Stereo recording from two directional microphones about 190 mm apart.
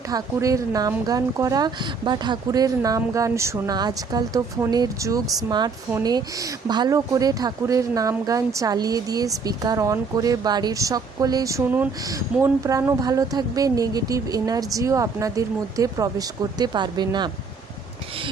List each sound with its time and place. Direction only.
0.1 s speech: 15° right (ahead or behind)